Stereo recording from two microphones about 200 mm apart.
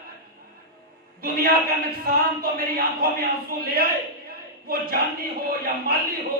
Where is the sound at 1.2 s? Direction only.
50° right (ahead or behind).